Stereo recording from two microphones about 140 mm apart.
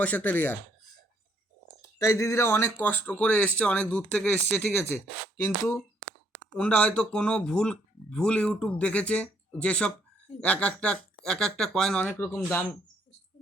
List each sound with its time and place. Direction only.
0.0 s speech: 10° left (ahead or behind)
2.0 s speech: 25° left (ahead or behind)
6.6 s speech: 10° left (ahead or behind)
12.1 s speech: 20° left (ahead or behind)